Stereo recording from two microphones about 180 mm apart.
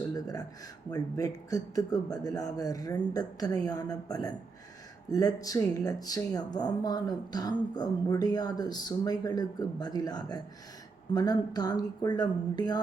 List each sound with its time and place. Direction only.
0.1 s speech: 20° left (ahead or behind)